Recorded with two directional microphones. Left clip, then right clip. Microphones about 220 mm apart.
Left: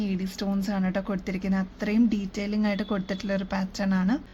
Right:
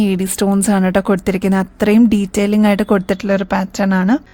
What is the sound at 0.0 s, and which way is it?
A woman's voice, 60° right (ahead or behind).